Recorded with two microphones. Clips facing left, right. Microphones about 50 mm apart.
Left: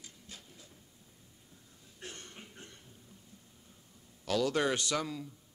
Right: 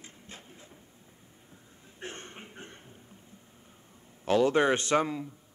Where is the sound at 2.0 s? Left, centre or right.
Right.